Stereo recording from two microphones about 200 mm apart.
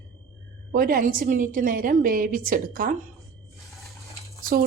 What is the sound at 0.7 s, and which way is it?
A woman's voice, 45° right (ahead or behind).